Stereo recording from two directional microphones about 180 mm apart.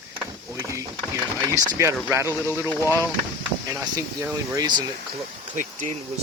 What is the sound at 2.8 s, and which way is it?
Speech, 15° left (ahead or behind).